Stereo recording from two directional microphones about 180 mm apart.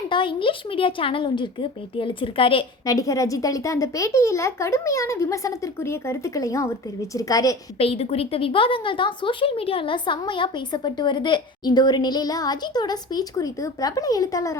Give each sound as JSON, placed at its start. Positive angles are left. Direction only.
{"t": 0.1, "sound": "a woman's voice", "side_deg": 25}
{"t": 7.8, "sound": "a woman's voice", "side_deg": 35}